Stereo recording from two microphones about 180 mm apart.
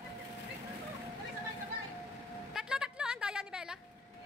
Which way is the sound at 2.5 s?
5° right (ahead or behind).